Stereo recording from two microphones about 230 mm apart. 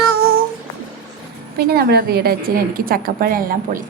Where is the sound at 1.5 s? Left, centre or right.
Right.